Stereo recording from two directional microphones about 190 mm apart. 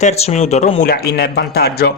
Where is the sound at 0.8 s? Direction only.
55° left (ahead or behind).